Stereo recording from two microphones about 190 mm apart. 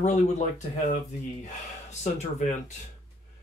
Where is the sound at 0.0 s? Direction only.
40° left (ahead or behind).